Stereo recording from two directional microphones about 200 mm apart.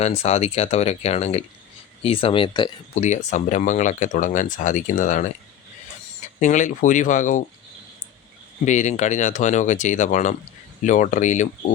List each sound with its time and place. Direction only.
0.0 s speech: 30° left (ahead or behind)
2.9 s speech: 35° left (ahead or behind)
6.4 s speech: 40° left (ahead or behind)
8.6 s speech: 35° left (ahead or behind)